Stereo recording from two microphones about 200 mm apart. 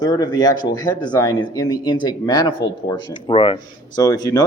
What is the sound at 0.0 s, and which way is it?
Speech, 20° left (ahead or behind).